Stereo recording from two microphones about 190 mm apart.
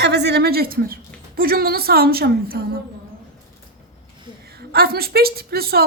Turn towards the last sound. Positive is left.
turn(degrees=-55)  # may be behind; listen again after turning